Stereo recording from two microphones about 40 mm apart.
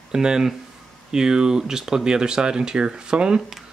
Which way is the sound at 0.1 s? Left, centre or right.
Centre.